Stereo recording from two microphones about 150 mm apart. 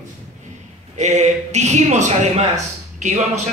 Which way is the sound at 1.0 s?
50° right (ahead or behind).